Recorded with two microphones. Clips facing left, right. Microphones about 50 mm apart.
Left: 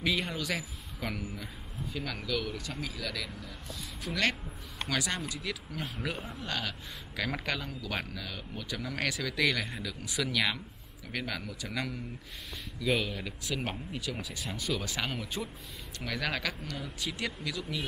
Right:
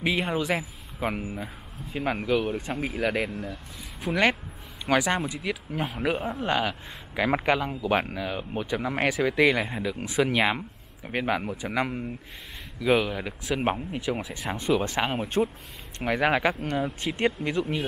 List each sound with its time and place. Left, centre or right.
0.0 s a man's voice: right
4.0 s a man's voice: right
16.0 s a man's voice: right